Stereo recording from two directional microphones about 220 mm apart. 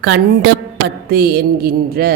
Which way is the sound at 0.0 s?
50° right (ahead or behind).